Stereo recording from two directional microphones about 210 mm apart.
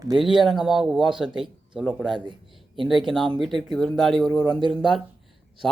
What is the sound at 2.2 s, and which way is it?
Speech, 25° right (ahead or behind).